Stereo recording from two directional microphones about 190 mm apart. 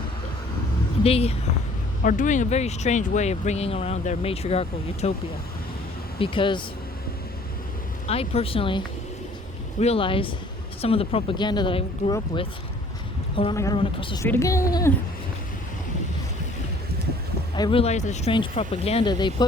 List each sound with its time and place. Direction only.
1.0 s speech: 30° left (ahead or behind)
2.0 s speech: 40° left (ahead or behind)
6.1 s speech: 30° left (ahead or behind)
8.0 s speech: 30° left (ahead or behind)
9.8 s speech: 30° left (ahead or behind)
14.3 s a woman's voice: 15° left (ahead or behind)
17.5 s speech: 25° left (ahead or behind)
18.3 s speech: 25° left (ahead or behind)